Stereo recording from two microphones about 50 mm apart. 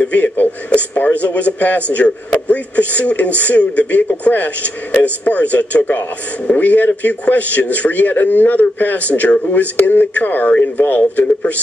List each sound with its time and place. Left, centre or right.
0.0 s speech: left